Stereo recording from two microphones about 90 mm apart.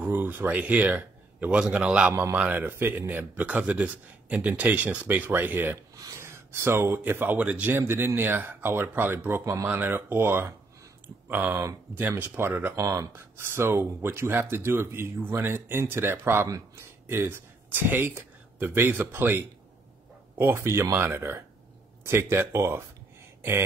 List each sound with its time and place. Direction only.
0.0 s a man's voice: 20° right (ahead or behind)
5.9 s a sound: 40° right (ahead or behind)
6.2 s speech: 30° right (ahead or behind)
12.7 s speech: 35° right (ahead or behind)